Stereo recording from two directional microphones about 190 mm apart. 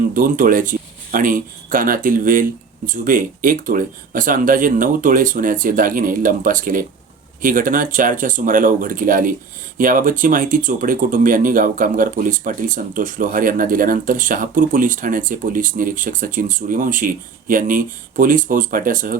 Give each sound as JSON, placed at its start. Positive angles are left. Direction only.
{"t": 0.1, "sound": "speech", "side_deg": -45}